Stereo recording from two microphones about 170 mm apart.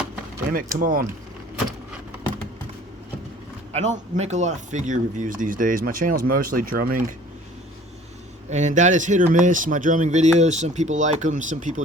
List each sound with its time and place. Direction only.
0.8 s speech: 55° right (ahead or behind)
3.7 s speech: 40° right (ahead or behind); by 7.0 s 55° right (ahead or behind)
8.4 s speech: 45° right (ahead or behind)